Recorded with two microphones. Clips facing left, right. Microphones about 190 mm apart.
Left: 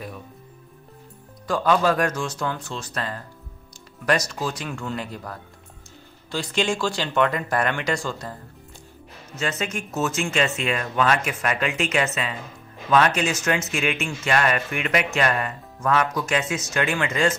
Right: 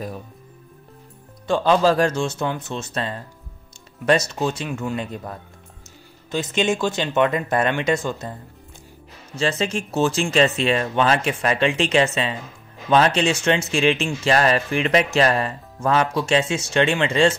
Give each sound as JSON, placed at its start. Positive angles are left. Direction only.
{"t": 1.5, "sound": "speech", "side_deg": -25}
{"t": 9.3, "sound": "speech", "side_deg": -30}